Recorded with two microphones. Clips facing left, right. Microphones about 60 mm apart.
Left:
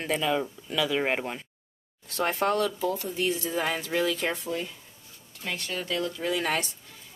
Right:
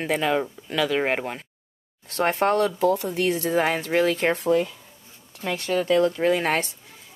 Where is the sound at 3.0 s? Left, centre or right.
Right.